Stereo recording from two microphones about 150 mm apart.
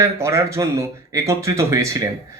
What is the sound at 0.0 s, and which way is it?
A man's voice, 20° right (ahead or behind).